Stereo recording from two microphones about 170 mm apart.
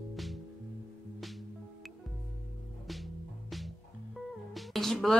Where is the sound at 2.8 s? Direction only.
Centre (ahead or behind).